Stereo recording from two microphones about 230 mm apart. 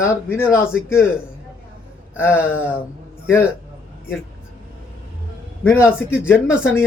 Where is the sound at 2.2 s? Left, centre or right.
Centre.